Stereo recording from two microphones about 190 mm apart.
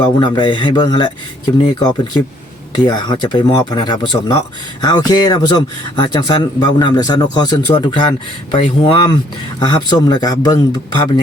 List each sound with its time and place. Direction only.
0.2 s a man's voice: 25° left (ahead or behind)